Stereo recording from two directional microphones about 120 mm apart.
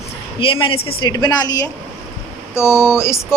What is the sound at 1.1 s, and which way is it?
Speech, 30° left (ahead or behind).